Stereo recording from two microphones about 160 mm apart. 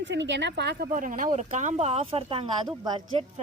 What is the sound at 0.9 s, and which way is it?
Speech, 55° right (ahead or behind).